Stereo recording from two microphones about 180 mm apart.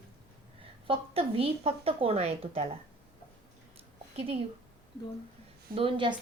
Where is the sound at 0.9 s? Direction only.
30° right (ahead or behind).